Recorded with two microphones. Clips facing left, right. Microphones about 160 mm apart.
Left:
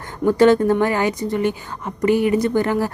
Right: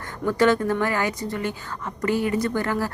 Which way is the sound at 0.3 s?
25° left (ahead or behind).